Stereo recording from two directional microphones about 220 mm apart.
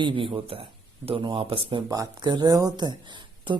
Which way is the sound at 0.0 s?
25° right (ahead or behind).